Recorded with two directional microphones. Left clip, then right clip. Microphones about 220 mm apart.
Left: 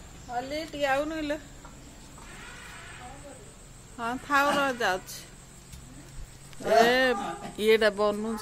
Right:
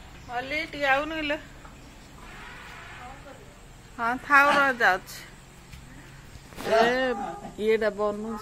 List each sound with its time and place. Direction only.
0.3 s a woman's voice: 25° left (ahead or behind)
3.9 s speech: 10° left (ahead or behind)
6.7 s speech: 10° left (ahead or behind)